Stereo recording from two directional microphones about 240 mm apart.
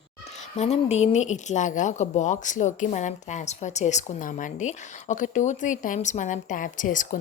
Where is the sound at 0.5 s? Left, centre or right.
Left.